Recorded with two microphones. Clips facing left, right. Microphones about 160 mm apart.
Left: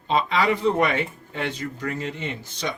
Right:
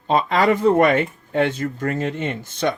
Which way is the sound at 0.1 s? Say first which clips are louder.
Right 4 dB; 50° right (ahead or behind).